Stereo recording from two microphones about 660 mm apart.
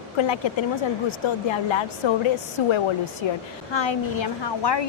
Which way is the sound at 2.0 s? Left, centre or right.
Left.